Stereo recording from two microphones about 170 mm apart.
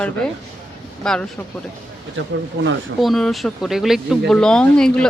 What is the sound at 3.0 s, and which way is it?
Speech, centre (ahead or behind).